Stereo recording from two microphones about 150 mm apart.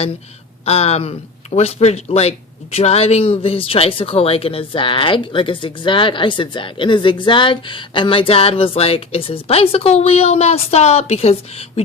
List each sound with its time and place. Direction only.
0.6 s speech: 45° left (ahead or behind)